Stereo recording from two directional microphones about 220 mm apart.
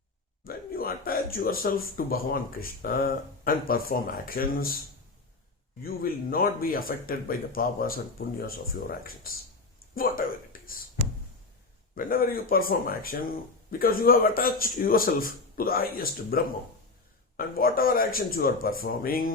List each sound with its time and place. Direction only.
0.4 s speech: 40° left (ahead or behind)
5.8 s speech: 40° left (ahead or behind)
11.9 s speech: 40° left (ahead or behind)